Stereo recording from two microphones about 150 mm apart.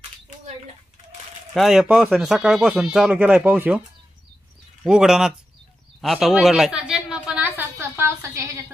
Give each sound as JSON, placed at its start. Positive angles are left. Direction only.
{"t": 1.5, "sound": "speech", "side_deg": 0}
{"t": 4.8, "sound": "speech", "side_deg": -5}
{"t": 5.9, "sound": "a sound", "side_deg": 0}
{"t": 8.0, "sound": "a woman's voice", "side_deg": -20}